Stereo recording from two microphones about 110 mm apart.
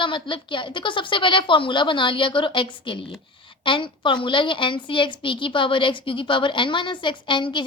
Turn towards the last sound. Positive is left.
turn(degrees=45)  # may be behind; listen again after turning